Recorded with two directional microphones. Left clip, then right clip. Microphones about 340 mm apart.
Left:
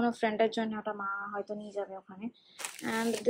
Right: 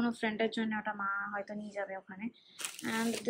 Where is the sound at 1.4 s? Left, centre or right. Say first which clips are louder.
Left 2 dB; centre.